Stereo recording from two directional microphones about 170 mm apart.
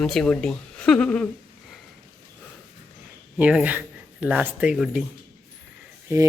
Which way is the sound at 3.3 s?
5° right (ahead or behind).